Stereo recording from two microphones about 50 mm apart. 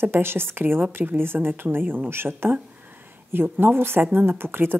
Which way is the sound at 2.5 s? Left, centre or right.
Right.